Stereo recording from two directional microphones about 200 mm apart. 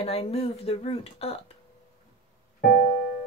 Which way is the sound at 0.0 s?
30° left (ahead or behind).